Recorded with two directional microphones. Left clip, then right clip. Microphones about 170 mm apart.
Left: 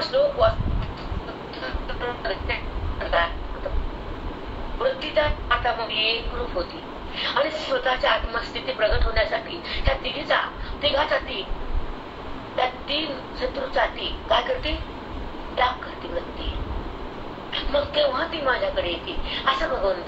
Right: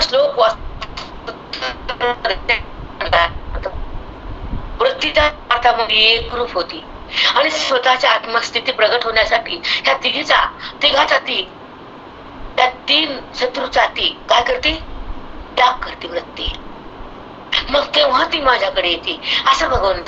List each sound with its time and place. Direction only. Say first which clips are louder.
0.0 s vehicle: right 7 dB; 60° right (ahead or behind)
1.5 s a sound: right 10 dB; 60° right (ahead or behind)
4.7 s a woman's voice: right 8 dB; 60° right (ahead or behind)
12.5 s a woman's voice: right 11 dB; 60° right (ahead or behind)
17.5 s a woman's voice: right 9 dB; 60° right (ahead or behind)